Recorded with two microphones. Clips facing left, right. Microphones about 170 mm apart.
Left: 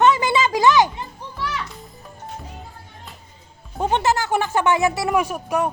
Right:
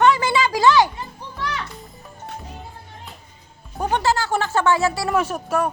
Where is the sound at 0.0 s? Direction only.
20° left (ahead or behind).